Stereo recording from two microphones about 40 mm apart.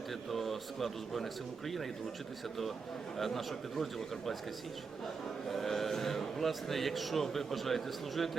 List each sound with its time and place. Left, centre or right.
0.1 s speech: centre
3.2 s speech: centre
5.5 s speech: centre